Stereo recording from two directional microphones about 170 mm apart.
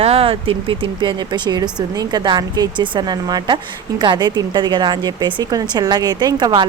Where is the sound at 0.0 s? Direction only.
35° right (ahead or behind).